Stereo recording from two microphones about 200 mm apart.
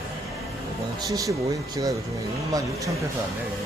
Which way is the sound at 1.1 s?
15° right (ahead or behind).